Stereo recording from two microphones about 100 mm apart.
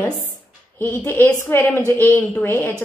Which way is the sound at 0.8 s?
20° left (ahead or behind).